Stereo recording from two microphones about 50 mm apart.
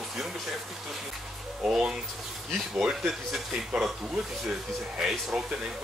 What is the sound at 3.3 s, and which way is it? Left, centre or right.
Speech, centre.